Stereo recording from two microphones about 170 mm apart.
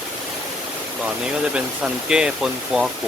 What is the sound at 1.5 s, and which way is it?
Speech, 5° right (ahead or behind).